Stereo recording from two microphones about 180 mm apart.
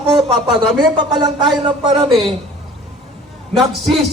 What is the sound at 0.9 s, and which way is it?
Speech, 25° right (ahead or behind).